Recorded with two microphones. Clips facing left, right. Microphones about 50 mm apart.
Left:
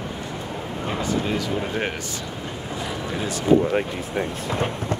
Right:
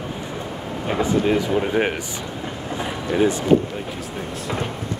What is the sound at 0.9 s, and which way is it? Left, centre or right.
Speech, centre.